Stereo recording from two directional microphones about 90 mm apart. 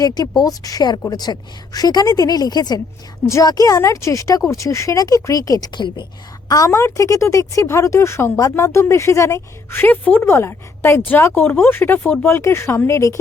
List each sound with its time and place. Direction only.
0.0 s a woman's voice: 50° left (ahead or behind)
6.5 s speech: 40° left (ahead or behind)